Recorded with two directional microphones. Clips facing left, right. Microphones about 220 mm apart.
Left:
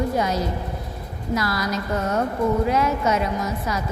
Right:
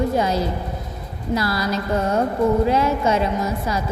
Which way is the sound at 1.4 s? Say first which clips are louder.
Right 2 dB; 30° right (ahead or behind).